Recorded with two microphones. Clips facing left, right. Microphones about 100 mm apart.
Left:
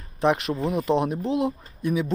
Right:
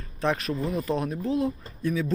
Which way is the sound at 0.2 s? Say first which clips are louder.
Left 4 dB; 20° left (ahead or behind).